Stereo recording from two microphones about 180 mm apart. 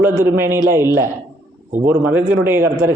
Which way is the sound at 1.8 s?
10° right (ahead or behind).